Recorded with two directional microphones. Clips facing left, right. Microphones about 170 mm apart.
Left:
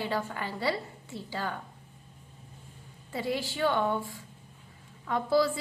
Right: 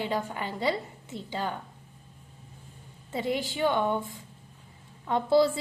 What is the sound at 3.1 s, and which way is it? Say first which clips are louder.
A woman's voice: right 2 dB; 20° right (ahead or behind).